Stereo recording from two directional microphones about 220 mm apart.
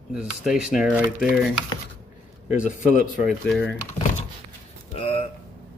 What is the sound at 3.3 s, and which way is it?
Speech, 5° left (ahead or behind).